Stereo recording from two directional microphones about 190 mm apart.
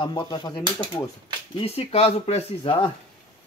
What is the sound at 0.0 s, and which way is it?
Speech, 25° left (ahead or behind).